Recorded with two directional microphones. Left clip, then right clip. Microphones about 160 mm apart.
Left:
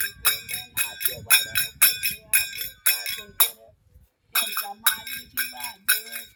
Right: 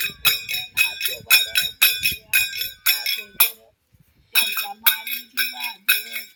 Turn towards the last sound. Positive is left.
turn(degrees=0)  # may be behind; listen again after turning